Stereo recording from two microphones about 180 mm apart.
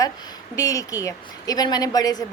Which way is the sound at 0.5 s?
20° left (ahead or behind).